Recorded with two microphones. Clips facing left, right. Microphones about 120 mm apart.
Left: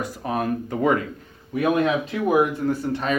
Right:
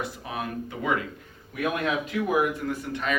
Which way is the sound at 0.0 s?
45° left (ahead or behind).